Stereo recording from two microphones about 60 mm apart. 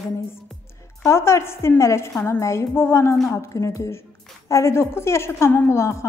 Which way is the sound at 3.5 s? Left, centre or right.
Left.